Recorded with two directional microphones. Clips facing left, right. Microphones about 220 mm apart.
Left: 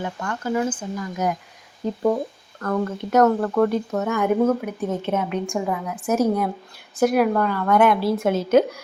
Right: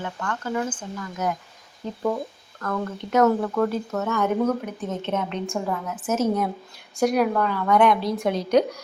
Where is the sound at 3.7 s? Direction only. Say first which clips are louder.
Left 3 dB; 15° left (ahead or behind).